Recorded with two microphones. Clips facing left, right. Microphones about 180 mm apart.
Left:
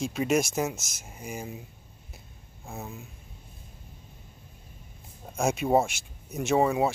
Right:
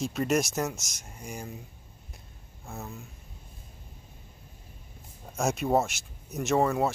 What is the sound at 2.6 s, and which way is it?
Speech, 15° left (ahead or behind).